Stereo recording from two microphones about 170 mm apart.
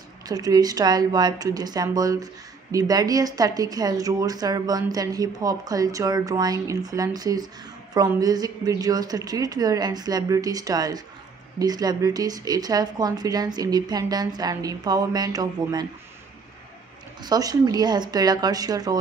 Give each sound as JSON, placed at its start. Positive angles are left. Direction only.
{"t": 0.3, "sound": "speech", "side_deg": -20}
{"t": 17.2, "sound": "speech", "side_deg": -20}